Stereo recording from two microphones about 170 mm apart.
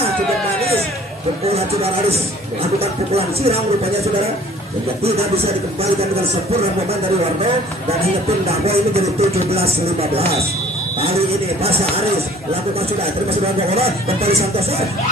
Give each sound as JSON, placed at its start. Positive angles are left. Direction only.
{"t": 1.5, "sound": "speech", "side_deg": -35}
{"t": 5.0, "sound": "speech", "side_deg": -35}
{"t": 8.0, "sound": "speech", "side_deg": -35}
{"t": 13.3, "sound": "speech", "side_deg": -35}